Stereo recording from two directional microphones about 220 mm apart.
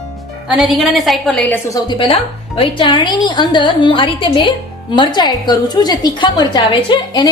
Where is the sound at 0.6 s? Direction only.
Centre (ahead or behind).